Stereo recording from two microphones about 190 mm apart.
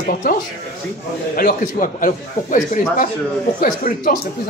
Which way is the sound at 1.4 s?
50° left (ahead or behind).